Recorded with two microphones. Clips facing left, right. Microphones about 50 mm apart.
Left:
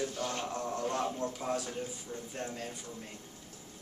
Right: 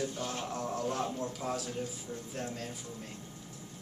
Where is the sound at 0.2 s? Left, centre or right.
Centre.